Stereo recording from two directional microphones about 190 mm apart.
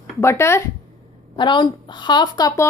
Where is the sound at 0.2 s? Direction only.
15° left (ahead or behind).